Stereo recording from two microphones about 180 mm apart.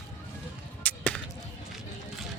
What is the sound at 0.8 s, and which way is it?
Basketball bounce, 10° left (ahead or behind).